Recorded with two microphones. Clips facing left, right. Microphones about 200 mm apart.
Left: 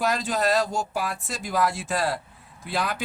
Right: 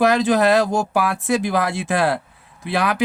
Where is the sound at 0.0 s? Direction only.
75° right (ahead or behind).